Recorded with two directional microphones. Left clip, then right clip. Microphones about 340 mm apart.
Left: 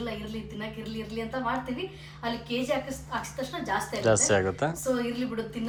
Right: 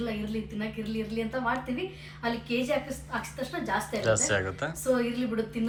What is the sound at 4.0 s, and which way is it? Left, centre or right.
Speech, centre.